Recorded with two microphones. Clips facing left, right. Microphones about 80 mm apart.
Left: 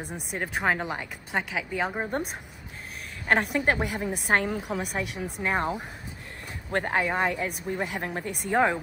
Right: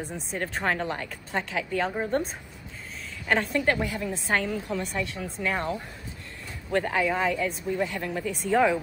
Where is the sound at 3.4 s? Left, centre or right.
Centre.